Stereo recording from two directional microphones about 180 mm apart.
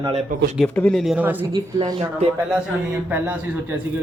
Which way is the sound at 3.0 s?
10° right (ahead or behind).